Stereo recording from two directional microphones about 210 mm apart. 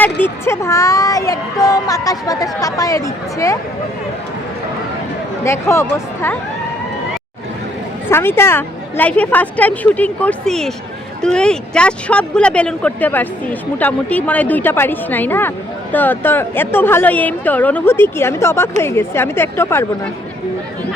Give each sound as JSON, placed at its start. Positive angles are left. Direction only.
{"t": 0.0, "sound": "speech", "side_deg": 10}
{"t": 5.4, "sound": "speech", "side_deg": 10}
{"t": 8.1, "sound": "speech", "side_deg": 10}